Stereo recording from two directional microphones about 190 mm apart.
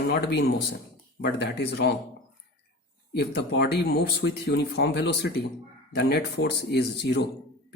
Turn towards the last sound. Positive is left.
turn(degrees=60)  # may be behind; listen again after turning